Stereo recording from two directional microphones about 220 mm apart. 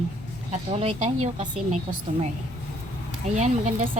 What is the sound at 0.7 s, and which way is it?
Speech, 25° right (ahead or behind).